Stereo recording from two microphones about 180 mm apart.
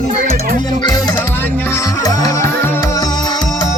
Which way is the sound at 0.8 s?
20° left (ahead or behind).